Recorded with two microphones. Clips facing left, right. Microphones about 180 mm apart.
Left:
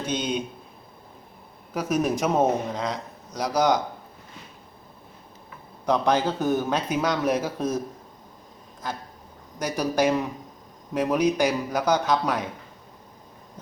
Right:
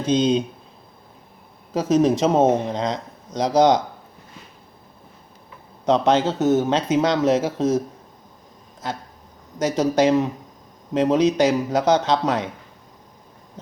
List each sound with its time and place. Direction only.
0.1 s speech: 30° right (ahead or behind)
1.7 s speech: 25° right (ahead or behind)
5.8 s speech: 25° right (ahead or behind)
9.6 s speech: 25° right (ahead or behind)